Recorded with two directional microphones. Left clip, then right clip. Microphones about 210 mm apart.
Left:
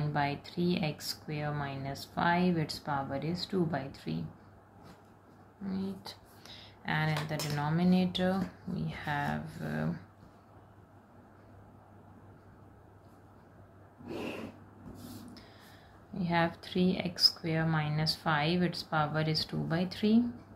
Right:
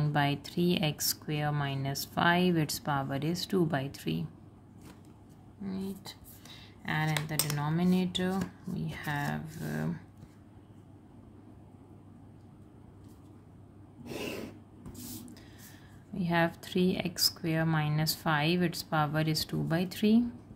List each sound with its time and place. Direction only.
0.0 s speech: 45° right (ahead or behind)
5.7 s speech: 30° right (ahead or behind)
16.2 s speech: 35° right (ahead or behind)